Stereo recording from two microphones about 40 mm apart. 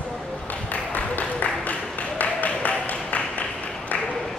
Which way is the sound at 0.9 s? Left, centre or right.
Left.